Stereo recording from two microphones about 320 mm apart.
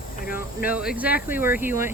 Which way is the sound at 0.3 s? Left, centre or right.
Centre.